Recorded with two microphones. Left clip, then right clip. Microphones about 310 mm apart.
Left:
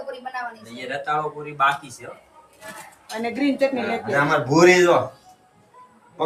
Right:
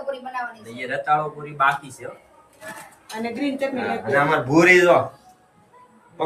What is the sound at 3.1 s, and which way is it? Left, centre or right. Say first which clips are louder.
Speech: left 3 dB; centre.